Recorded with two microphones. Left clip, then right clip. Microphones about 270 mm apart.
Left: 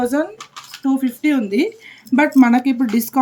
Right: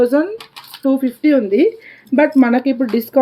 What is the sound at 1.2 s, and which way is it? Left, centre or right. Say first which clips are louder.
Speech: right 7 dB; left.